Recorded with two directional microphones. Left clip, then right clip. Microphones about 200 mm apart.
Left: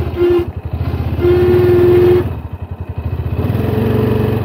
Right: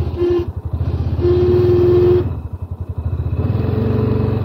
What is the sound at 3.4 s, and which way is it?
Vehicle, 55° left (ahead or behind).